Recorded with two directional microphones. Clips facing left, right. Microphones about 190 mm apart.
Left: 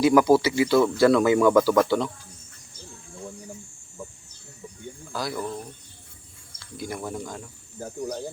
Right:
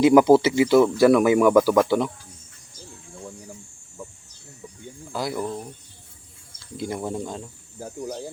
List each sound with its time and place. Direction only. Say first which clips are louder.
0.0 s speech: right 3 dB; 20° right (ahead or behind)
5.1 s speech: right 3 dB; 20° right (ahead or behind)
6.7 s speech: right 4 dB; 25° right (ahead or behind)